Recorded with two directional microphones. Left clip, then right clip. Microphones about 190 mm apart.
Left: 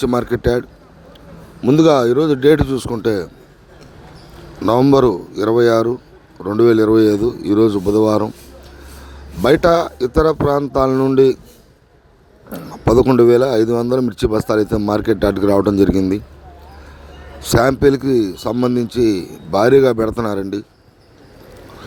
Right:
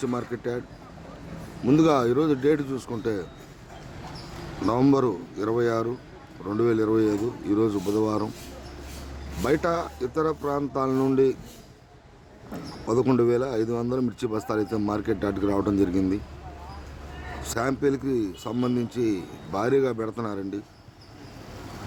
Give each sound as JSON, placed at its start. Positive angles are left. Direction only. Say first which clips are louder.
{"t": 0.0, "sound": "speech", "louder": "left 13 dB", "side_deg": 45}
{"t": 1.6, "sound": "a man's voice", "louder": "left 9 dB", "side_deg": 35}
{"t": 4.6, "sound": "a man's voice", "louder": "left 10 dB", "side_deg": 35}
{"t": 9.4, "sound": "a man's voice", "louder": "left 12 dB", "side_deg": 40}
{"t": 12.5, "sound": "a man's voice", "louder": "left 12 dB", "side_deg": 40}
{"t": 17.4, "sound": "a man's voice", "louder": "left 13 dB", "side_deg": 40}